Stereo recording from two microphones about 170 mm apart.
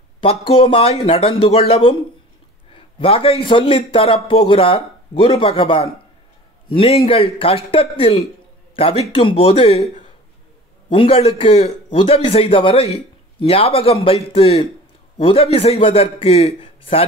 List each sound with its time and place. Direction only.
0.2 s a man's voice: 30° left (ahead or behind)
10.9 s a man's voice: 30° left (ahead or behind)